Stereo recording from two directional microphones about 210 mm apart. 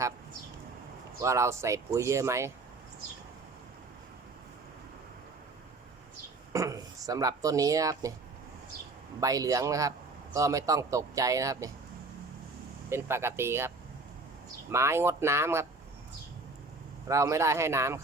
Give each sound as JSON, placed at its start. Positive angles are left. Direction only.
{"t": 1.2, "sound": "speech", "side_deg": -15}
{"t": 6.5, "sound": "speech", "side_deg": -15}
{"t": 9.2, "sound": "speech", "side_deg": -15}
{"t": 12.9, "sound": "speech", "side_deg": -10}
{"t": 17.1, "sound": "speech", "side_deg": -15}